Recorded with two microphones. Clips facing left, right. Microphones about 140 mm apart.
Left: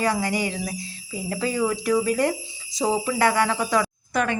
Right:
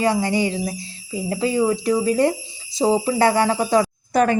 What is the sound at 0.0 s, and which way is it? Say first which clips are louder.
Speech: right 4 dB; 30° right (ahead or behind).